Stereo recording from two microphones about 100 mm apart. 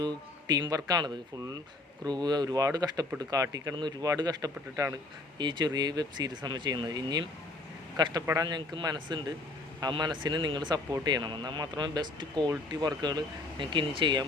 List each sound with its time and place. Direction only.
0.0 s speech: 45° right (ahead or behind)
5.4 s speech: 50° right (ahead or behind)